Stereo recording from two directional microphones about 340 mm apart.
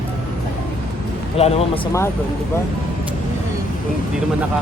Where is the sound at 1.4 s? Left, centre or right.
Centre.